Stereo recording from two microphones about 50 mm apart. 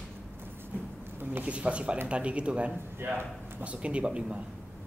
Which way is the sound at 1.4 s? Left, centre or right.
Right.